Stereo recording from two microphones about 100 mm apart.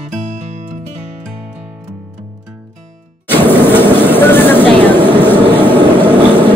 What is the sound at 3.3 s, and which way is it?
Vehicle, 20° left (ahead or behind).